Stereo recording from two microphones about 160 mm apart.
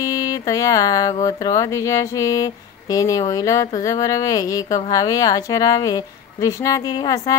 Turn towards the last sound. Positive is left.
turn(degrees=25)  # may be behind; listen again after turning